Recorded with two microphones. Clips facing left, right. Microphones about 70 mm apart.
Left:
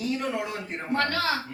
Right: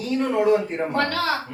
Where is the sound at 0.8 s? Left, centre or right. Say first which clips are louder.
Right 4 dB; right.